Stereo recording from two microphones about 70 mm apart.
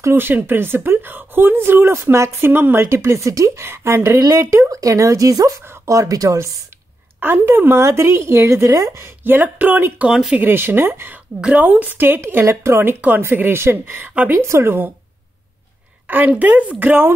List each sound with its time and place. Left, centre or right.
0.0 s speech: right
3.0 s speech: right
4.6 s speech: right
7.2 s speech: right
10.0 s speech: centre
10.4 s speech: right
11.4 s speech: right
14.4 s speech: right
16.3 s speech: right